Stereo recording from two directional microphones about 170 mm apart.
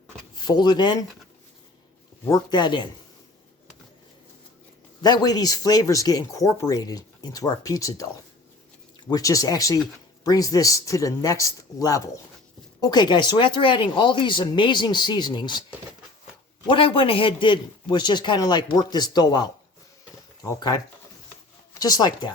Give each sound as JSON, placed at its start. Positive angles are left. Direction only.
{"t": 0.3, "sound": "speech", "side_deg": 25}
{"t": 2.3, "sound": "speech", "side_deg": 25}
{"t": 5.0, "sound": "speech", "side_deg": 25}
{"t": 16.6, "sound": "speech", "side_deg": 30}